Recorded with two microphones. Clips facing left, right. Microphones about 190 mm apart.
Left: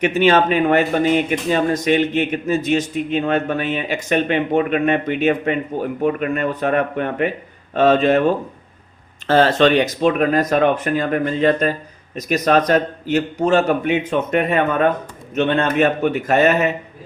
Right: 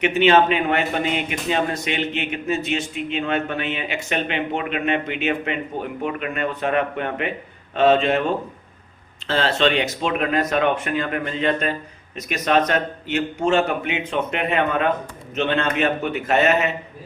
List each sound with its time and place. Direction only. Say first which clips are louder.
0.0 s a man's voice: left 1 dB; 40° left (ahead or behind)
9.2 s a man's voice: left 6 dB; 45° left (ahead or behind)